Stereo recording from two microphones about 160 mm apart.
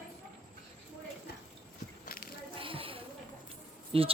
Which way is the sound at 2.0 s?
65° left (ahead or behind).